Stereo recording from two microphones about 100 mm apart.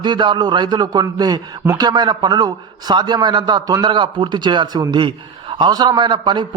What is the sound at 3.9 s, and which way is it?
A man's voice, 55° right (ahead or behind).